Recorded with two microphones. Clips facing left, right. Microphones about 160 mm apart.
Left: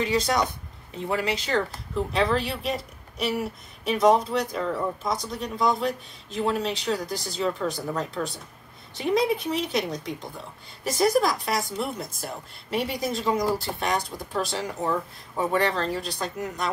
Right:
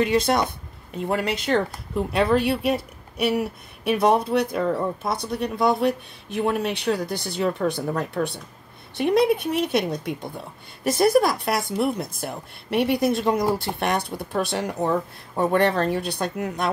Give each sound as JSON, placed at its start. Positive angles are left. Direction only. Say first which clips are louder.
{"t": 0.0, "sound": "speech", "louder": "right 4 dB", "side_deg": -60}